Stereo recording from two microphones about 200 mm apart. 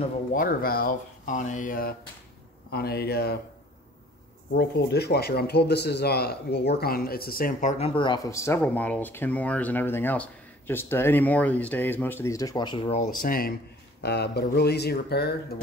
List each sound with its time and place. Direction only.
0.3 s speech: 45° left (ahead or behind)
4.6 s speech: 55° left (ahead or behind)
7.7 s speech: 30° left (ahead or behind)
13.2 s speech: 45° left (ahead or behind)
14.0 s speech: 55° left (ahead or behind)